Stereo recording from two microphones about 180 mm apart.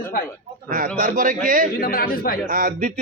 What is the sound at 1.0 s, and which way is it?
Speech, 50° right (ahead or behind).